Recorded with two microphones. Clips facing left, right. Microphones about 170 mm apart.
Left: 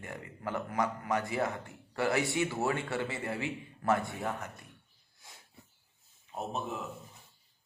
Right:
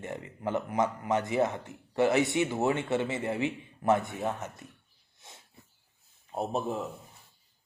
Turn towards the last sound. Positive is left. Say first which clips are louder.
# right 6 dB
turn(degrees=-35)  # may be behind; listen again after turning